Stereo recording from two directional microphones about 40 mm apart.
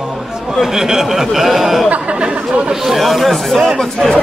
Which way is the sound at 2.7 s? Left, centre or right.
Centre.